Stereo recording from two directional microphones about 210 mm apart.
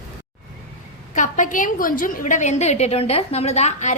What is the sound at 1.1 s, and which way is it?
A woman's voice, 35° left (ahead or behind).